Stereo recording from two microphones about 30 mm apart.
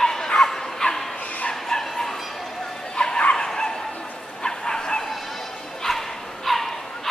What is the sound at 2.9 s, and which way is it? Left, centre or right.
Bow-wow, left.